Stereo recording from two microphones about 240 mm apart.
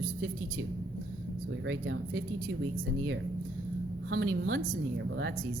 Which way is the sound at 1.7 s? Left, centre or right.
Right.